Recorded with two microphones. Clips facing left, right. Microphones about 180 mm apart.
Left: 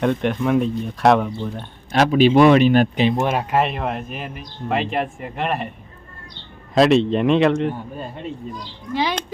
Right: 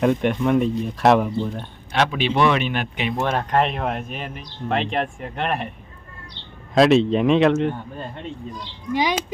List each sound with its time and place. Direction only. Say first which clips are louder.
0.0 s speech: right 1 dB; centre (ahead or behind)
1.9 s speech: left 7 dB; 40° left (ahead or behind)
3.2 s speech: left 1 dB; 10° left (ahead or behind)
6.7 s speech: even; centre (ahead or behind)
8.9 s speech: right 1 dB; 15° right (ahead or behind)